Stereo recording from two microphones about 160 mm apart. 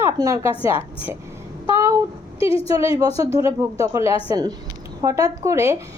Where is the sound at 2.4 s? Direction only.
35° left (ahead or behind).